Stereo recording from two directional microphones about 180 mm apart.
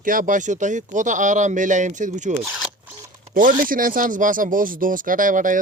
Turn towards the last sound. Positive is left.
turn(degrees=-45)  # may be behind; listen again after turning